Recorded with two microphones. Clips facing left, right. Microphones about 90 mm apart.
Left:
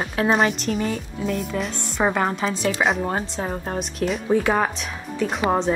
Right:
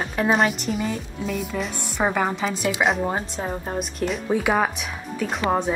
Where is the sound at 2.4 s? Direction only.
10° right (ahead or behind).